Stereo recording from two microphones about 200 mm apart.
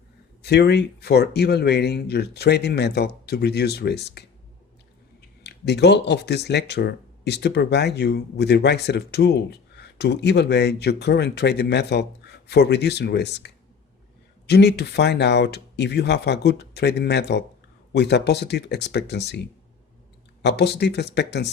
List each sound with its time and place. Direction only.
0.4 s speech: 55° left (ahead or behind)
5.4 s speech: 55° left (ahead or behind)